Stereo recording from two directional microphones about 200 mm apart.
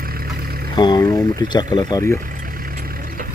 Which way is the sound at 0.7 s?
20° left (ahead or behind).